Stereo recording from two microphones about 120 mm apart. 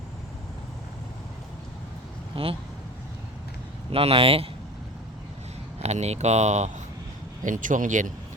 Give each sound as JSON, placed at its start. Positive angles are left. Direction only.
{"t": 2.3, "sound": "speech", "side_deg": -50}
{"t": 3.8, "sound": "speech", "side_deg": -50}
{"t": 5.8, "sound": "speech", "side_deg": -65}
{"t": 7.4, "sound": "speech", "side_deg": -90}